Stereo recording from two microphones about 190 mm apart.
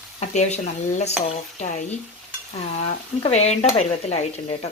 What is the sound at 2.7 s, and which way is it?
Speech, 35° left (ahead or behind).